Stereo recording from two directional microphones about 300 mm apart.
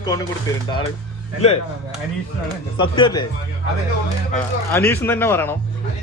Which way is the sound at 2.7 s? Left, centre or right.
Centre.